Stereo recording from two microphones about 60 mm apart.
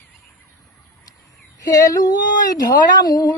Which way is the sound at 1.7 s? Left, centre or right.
Left.